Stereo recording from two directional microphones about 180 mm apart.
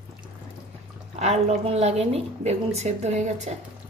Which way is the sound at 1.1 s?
40° right (ahead or behind).